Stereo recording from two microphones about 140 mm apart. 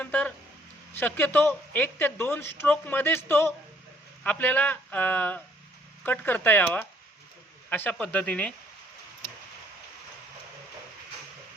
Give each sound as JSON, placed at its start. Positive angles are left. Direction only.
{"t": 0.0, "sound": "a woman's voice", "side_deg": 10}